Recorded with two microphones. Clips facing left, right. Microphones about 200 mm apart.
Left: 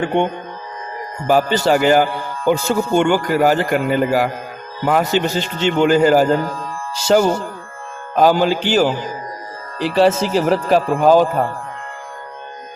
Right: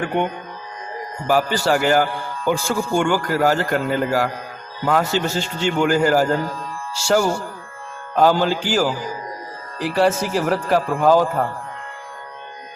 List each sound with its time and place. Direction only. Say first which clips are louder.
0.0 s a man's voice: left 4 dB; 25° left (ahead or behind)